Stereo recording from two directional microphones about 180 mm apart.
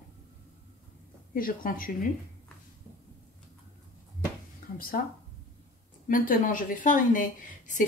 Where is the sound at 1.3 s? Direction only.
50° left (ahead or behind).